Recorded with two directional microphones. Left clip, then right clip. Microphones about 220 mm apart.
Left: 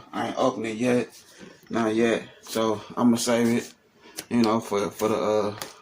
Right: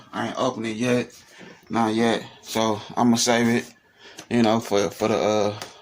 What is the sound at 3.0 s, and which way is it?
Speech, 40° right (ahead or behind).